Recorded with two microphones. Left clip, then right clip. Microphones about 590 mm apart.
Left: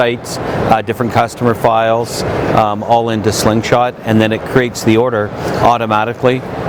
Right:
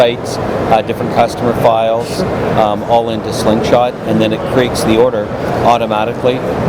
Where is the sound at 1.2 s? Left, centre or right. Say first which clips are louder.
Right 5 dB; left.